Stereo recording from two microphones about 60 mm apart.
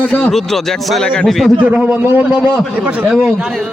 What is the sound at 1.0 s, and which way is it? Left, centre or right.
Speech, centre.